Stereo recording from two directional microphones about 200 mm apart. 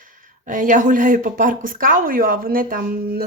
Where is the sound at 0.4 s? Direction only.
40° right (ahead or behind).